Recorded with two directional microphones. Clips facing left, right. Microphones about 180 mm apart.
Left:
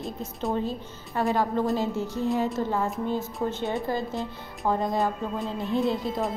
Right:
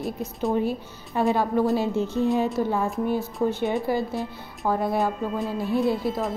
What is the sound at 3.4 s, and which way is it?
A woman's voice, centre (ahead or behind).